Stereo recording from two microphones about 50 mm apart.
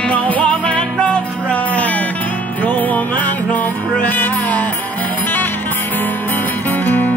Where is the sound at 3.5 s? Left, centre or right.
Left.